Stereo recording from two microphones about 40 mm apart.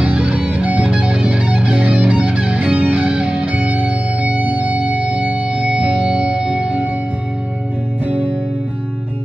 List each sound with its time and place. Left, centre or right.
0.0 s music: right
0.9 s music: right